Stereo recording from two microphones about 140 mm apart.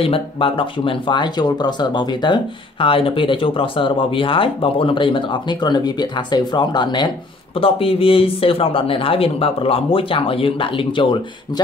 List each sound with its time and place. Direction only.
0.0 s speech: 40° left (ahead or behind)